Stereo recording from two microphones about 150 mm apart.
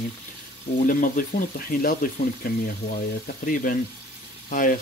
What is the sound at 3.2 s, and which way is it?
Speech, 70° left (ahead or behind).